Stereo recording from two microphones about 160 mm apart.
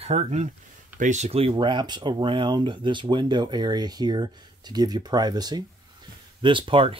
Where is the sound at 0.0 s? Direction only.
40° right (ahead or behind).